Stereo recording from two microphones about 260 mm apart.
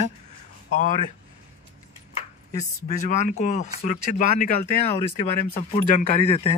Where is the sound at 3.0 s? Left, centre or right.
Left.